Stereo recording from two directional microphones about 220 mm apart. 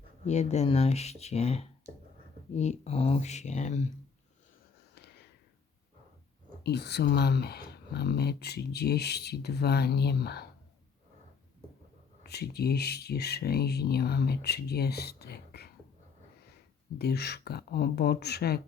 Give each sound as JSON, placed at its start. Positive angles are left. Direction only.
{"t": 0.3, "sound": "speech", "side_deg": 30}
{"t": 6.6, "sound": "speech", "side_deg": 50}
{"t": 12.2, "sound": "speech", "side_deg": 45}
{"t": 17.0, "sound": "speech", "side_deg": 45}